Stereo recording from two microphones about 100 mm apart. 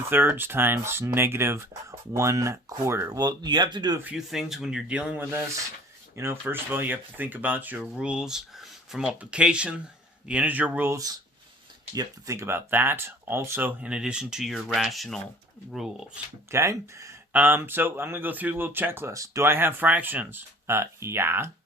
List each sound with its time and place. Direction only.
0.1 s speech: 20° right (ahead or behind)
3.2 s speech: 45° right (ahead or behind)
4.3 s speech: centre (ahead or behind)
6.4 s speech: 20° right (ahead or behind)
10.9 s speech: 40° right (ahead or behind); by 16.2 s 5° right (ahead or behind)
16.5 s speech: 30° right (ahead or behind)
17.3 s speech: 20° right (ahead or behind)